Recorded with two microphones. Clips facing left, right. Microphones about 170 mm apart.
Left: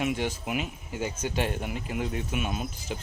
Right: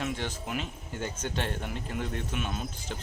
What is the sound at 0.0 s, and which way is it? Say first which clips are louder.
Speech: left 5 dB; 10° left (ahead or behind).